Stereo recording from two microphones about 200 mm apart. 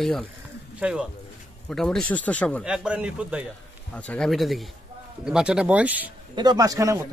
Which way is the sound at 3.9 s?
5° left (ahead or behind).